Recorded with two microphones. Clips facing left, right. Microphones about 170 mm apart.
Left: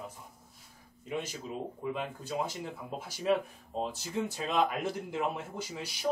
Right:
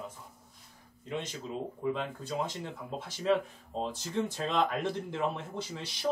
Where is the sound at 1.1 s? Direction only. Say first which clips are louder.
Even; 10° left (ahead or behind).